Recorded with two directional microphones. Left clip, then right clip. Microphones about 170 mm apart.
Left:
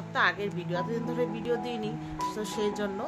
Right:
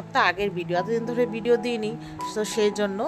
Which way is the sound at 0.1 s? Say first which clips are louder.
Right 5 dB; 45° right (ahead or behind).